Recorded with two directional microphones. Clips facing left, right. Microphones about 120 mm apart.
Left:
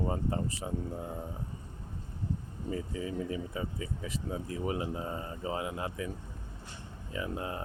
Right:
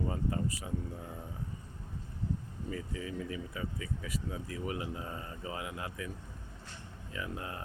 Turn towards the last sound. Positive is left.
turn(degrees=25)  # may be behind; listen again after turning